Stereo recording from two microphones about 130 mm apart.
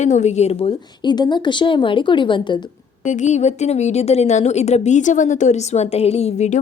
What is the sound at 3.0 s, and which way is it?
A woman's voice, 70° left (ahead or behind).